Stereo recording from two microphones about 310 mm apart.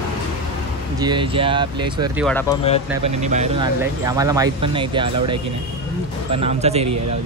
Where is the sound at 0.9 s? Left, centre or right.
Centre.